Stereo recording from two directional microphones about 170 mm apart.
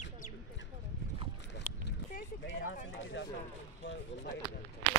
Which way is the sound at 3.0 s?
90° left.